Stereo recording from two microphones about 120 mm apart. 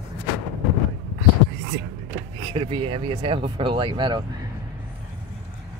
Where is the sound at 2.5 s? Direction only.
50° right (ahead or behind).